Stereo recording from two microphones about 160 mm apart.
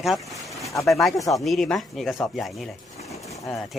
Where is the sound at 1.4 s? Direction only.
Centre (ahead or behind).